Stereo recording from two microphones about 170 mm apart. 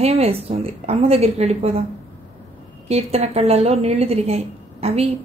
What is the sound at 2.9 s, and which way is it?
A woman's voice, 35° right (ahead or behind).